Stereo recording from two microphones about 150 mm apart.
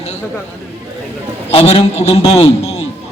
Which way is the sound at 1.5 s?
45° left (ahead or behind).